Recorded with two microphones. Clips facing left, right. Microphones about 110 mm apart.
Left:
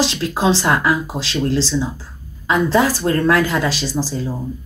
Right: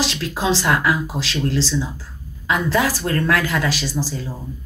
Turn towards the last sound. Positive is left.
turn(degrees=30)  # may be behind; listen again after turning